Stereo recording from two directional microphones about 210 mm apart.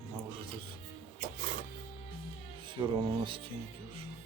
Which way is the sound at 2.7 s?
25° right (ahead or behind).